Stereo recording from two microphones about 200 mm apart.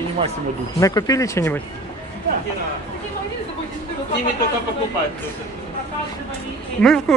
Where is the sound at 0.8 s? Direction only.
15° left (ahead or behind).